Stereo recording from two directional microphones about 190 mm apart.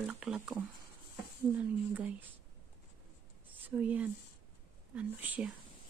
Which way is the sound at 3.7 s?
10° right (ahead or behind).